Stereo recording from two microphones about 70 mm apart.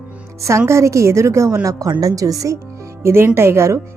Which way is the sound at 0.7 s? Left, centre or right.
Right.